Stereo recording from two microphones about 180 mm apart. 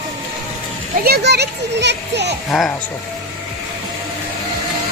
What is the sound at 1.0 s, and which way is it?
A child's voice, 65° right (ahead or behind).